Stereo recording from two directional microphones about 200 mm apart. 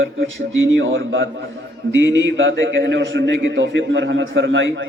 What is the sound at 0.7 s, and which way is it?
A man's voice, 70° right (ahead or behind).